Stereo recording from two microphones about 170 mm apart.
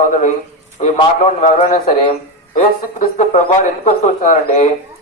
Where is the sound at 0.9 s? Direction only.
40° left (ahead or behind).